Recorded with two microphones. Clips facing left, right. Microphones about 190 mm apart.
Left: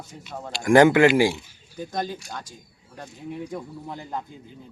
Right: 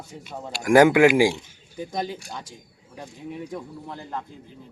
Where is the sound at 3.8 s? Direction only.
15° left (ahead or behind).